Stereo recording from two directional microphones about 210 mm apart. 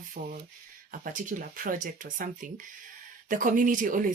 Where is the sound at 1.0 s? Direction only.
40° right (ahead or behind).